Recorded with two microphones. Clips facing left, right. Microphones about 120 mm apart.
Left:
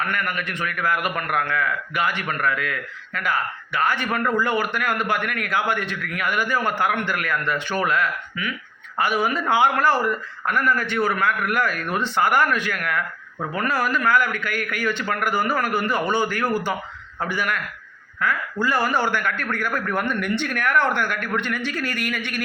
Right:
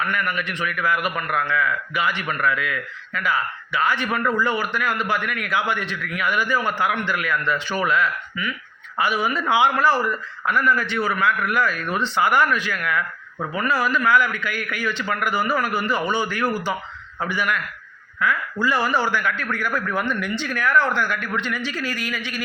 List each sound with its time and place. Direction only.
0.0 s a man's voice: 50° left (ahead or behind)